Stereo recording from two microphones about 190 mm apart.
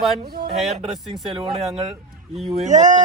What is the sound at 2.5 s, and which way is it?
Speech, 40° right (ahead or behind).